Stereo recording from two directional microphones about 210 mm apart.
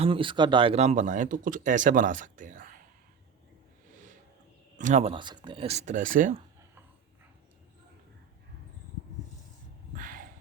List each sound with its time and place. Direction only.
0.0 s speech: 25° right (ahead or behind); by 2.7 s 40° right (ahead or behind)
4.8 s speech: 35° right (ahead or behind)
10.0 s a sound: 40° right (ahead or behind)